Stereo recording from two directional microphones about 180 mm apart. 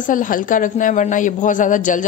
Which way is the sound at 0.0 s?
45° left (ahead or behind).